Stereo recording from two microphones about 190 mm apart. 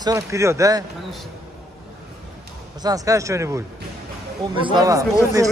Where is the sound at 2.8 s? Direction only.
20° right (ahead or behind).